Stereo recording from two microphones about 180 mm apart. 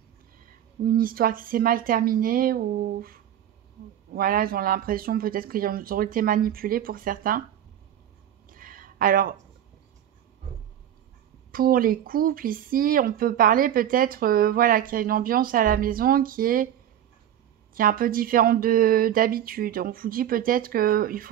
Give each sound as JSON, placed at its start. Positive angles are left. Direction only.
{"t": 0.8, "sound": "speech", "side_deg": -55}
{"t": 8.5, "sound": "a sound", "side_deg": -50}
{"t": 11.5, "sound": "speech", "side_deg": -50}
{"t": 17.7, "sound": "speech", "side_deg": -50}